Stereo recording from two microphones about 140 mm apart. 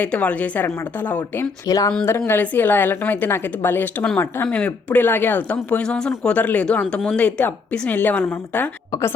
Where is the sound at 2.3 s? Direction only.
15° left (ahead or behind).